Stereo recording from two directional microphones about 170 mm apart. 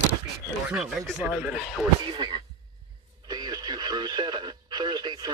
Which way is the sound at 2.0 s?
25° right (ahead or behind).